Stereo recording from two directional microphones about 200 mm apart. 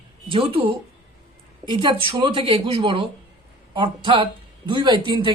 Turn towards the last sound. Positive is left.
turn(degrees=-25)  # may be behind; listen again after turning